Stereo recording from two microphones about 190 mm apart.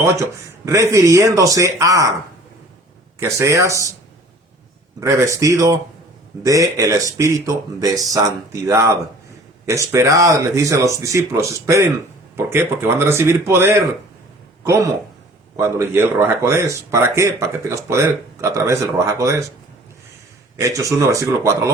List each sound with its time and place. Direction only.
0.6 s speech: 15° right (ahead or behind)
3.2 s speech: 15° right (ahead or behind)
4.9 s speech: 15° right (ahead or behind)
20.6 s speech: 15° right (ahead or behind)